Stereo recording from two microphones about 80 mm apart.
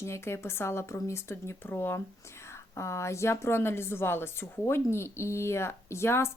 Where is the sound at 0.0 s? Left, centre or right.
Left.